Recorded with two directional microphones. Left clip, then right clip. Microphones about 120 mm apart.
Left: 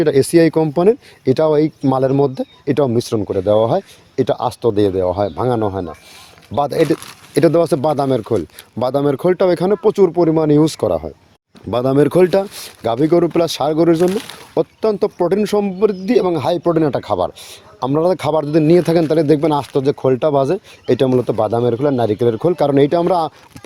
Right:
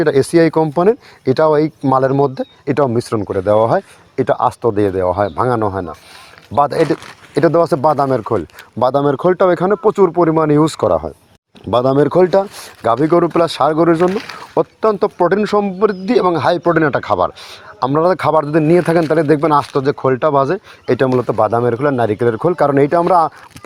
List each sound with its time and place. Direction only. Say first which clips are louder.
0.0 s speech: even; 20° left (ahead or behind)
8.8 s speech: right 3 dB; 10° left (ahead or behind); by 10.8 s 30° left (ahead or behind)
10.8 s speech: right 3 dB; 5° left (ahead or behind)
11.9 s speech: left 2 dB; 35° left (ahead or behind)
13.8 s speech: right 1 dB; 35° left (ahead or behind)
14.3 s speech: right 2 dB; 20° left (ahead or behind)